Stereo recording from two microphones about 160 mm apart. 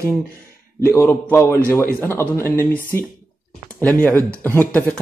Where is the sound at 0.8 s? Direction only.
15° left (ahead or behind).